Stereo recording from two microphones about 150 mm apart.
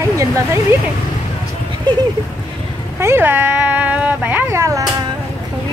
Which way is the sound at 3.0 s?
15° right (ahead or behind).